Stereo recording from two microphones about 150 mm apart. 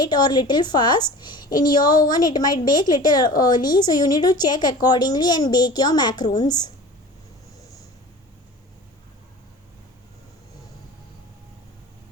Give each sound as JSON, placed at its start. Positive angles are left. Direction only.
{"t": 0.0, "sound": "a woman's voice", "side_deg": 30}